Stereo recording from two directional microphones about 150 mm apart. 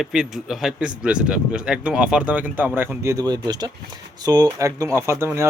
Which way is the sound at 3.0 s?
25° right (ahead or behind).